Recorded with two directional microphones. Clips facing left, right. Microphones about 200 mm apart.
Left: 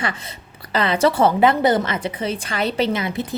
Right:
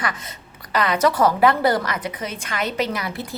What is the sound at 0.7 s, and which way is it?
A woman's voice, 30° left (ahead or behind).